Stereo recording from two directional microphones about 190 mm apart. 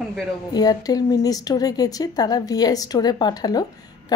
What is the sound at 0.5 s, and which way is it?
Speech, 20° left (ahead or behind).